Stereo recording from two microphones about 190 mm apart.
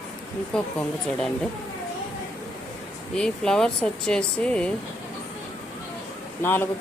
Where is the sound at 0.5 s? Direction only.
5° left (ahead or behind).